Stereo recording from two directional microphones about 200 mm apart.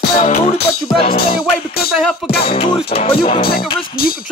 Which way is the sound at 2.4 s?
30° left (ahead or behind).